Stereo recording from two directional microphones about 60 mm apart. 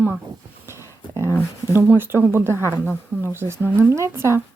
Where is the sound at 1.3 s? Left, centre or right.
Right.